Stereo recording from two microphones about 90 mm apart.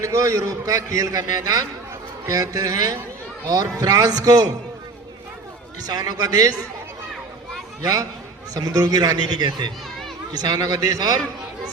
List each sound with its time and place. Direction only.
0.0 s a man's voice: 35° right (ahead or behind)
5.8 s a man's voice: 45° right (ahead or behind)
7.8 s a man's voice: 40° right (ahead or behind)